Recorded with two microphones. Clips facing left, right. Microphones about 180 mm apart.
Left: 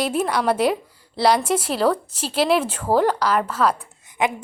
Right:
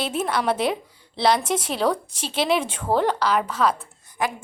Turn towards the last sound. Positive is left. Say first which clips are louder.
# left 4 dB
turn(degrees=20)  # may be behind; listen again after turning